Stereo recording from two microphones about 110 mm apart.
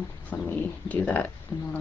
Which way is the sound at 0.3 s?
15° left (ahead or behind).